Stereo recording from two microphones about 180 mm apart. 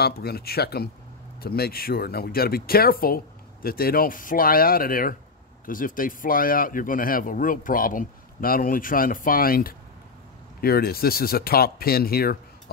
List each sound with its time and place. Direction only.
0.0 s speech: 60° left (ahead or behind)